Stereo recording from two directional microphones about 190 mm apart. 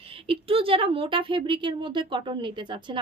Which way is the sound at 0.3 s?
30° right (ahead or behind).